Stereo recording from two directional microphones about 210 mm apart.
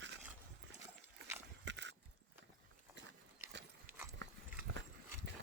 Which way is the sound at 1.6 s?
60° right (ahead or behind).